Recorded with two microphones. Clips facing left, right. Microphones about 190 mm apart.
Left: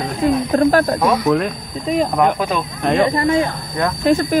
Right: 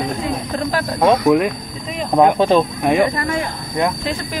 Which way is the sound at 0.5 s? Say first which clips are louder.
Left 10 dB; 45° left (ahead or behind).